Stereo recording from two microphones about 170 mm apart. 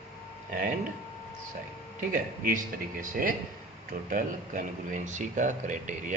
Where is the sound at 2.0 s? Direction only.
55° right (ahead or behind).